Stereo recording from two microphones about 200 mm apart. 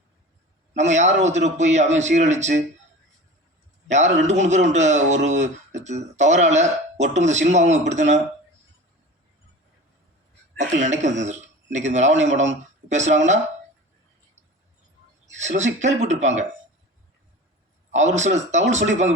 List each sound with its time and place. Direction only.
0.8 s speech: 35° right (ahead or behind)
3.8 s speech: 35° right (ahead or behind)
10.8 s speech: 35° right (ahead or behind)
15.4 s speech: 35° right (ahead or behind)
17.9 s speech: 35° right (ahead or behind)